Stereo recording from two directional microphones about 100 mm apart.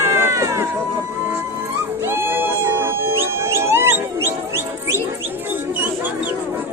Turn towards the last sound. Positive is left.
turn(degrees=-25)  # may be behind; listen again after turning